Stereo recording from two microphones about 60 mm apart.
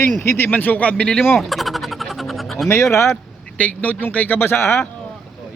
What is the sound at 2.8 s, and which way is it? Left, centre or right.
Speech, left.